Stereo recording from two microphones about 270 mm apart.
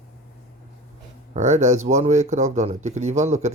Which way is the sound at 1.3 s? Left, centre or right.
Right.